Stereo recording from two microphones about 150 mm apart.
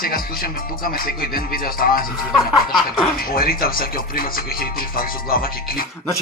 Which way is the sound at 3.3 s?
75° left (ahead or behind).